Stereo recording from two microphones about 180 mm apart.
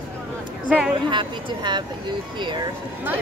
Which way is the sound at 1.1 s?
25° right (ahead or behind).